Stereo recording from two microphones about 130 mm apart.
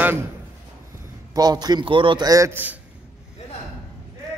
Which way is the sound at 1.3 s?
30° right (ahead or behind).